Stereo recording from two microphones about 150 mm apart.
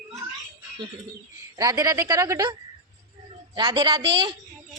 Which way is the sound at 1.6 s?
25° right (ahead or behind).